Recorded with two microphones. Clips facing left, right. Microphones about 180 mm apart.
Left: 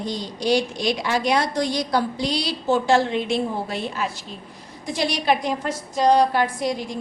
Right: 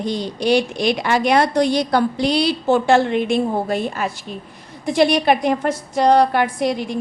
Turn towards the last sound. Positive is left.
turn(degrees=-60)  # may be behind; listen again after turning